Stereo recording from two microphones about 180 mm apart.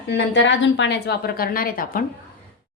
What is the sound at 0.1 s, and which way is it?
A woman's voice, 90° left.